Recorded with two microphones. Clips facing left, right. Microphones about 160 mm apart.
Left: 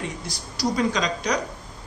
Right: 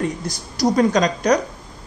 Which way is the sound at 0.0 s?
50° right (ahead or behind).